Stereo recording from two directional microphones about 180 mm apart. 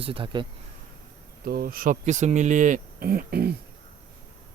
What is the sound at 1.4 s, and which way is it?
Speech, 55° right (ahead or behind).